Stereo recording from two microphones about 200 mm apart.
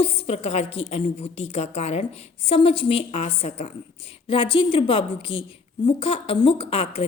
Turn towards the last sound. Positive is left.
turn(degrees=30)  # may be behind; listen again after turning